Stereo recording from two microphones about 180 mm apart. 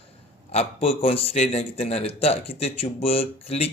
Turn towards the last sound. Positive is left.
turn(degrees=35)  # may be behind; listen again after turning